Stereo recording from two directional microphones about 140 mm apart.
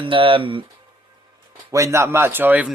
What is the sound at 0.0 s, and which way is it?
Speech, 40° right (ahead or behind).